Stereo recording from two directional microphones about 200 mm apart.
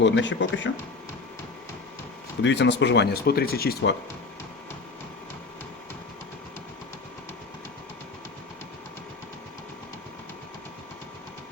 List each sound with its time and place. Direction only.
0.0 s speech: 65° left (ahead or behind)
2.4 s speech: 60° left (ahead or behind)